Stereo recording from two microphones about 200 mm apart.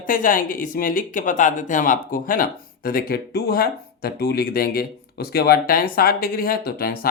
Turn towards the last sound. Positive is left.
turn(degrees=50)  # may be behind; listen again after turning